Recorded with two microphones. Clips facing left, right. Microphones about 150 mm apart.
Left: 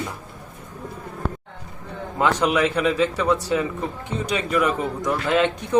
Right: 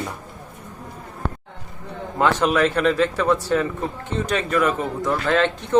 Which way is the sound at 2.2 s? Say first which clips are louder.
Right 1 dB; 15° left (ahead or behind).